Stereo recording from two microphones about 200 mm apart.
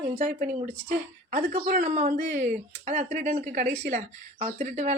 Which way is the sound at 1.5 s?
40° right (ahead or behind).